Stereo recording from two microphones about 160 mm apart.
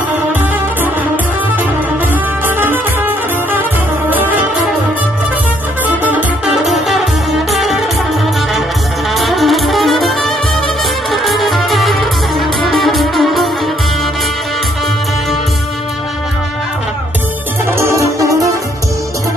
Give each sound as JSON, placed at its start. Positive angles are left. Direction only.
{"t": 2.4, "sound": "music", "side_deg": -10}
{"t": 6.0, "sound": "music", "side_deg": -5}
{"t": 9.1, "sound": "music", "side_deg": 0}
{"t": 17.6, "sound": "music", "side_deg": -15}